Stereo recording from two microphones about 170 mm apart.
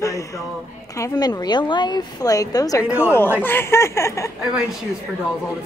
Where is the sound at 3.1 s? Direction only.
15° left (ahead or behind).